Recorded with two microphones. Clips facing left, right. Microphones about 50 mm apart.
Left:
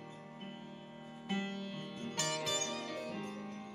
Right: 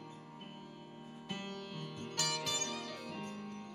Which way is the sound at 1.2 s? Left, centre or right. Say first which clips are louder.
Left 5 dB; left.